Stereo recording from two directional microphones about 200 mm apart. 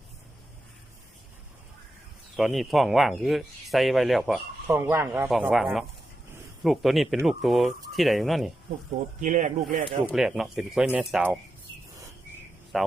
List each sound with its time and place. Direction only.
2.3 s speech: centre (ahead or behind)
4.7 s speech: 10° right (ahead or behind)
5.3 s speech: centre (ahead or behind)
9.2 s speech: 40° right (ahead or behind)
10.1 s speech: centre (ahead or behind)
12.7 s speech: centre (ahead or behind)